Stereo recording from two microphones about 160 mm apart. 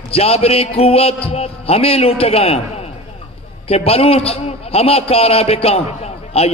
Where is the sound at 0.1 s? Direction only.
35° left (ahead or behind).